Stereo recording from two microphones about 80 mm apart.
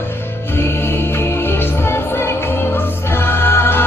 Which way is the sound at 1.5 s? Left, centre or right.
Left.